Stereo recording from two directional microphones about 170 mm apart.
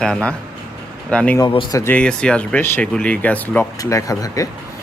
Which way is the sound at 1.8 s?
10° left (ahead or behind).